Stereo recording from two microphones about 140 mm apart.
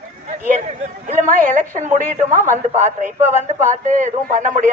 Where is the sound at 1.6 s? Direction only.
65° right (ahead or behind).